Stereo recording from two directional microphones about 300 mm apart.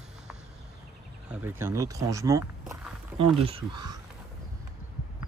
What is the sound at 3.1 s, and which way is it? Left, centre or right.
Speech, centre.